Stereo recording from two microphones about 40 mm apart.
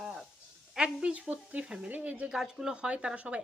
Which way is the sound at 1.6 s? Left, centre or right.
Right.